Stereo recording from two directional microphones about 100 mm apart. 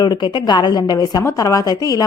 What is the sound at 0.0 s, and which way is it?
A woman's voice, 50° left (ahead or behind).